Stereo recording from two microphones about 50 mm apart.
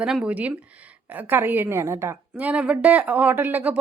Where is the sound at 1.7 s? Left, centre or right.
Right.